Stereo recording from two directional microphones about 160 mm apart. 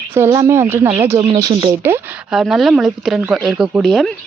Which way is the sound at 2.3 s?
Centre (ahead or behind).